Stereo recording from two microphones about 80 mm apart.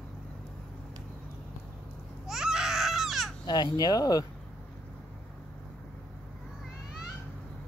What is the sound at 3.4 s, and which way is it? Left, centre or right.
Speech, left.